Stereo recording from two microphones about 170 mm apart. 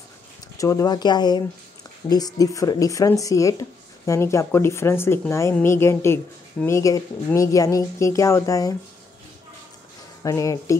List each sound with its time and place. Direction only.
0.6 s speech: 20° left (ahead or behind)
10.2 s speech: 20° left (ahead or behind)